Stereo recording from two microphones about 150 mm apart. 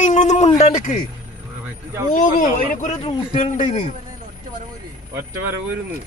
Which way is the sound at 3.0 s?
40° left (ahead or behind).